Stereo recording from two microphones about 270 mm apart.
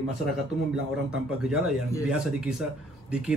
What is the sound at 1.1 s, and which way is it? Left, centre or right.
A man's voice, centre.